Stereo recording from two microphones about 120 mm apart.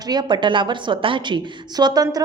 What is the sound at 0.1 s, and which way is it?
A woman's voice, 40° right (ahead or behind).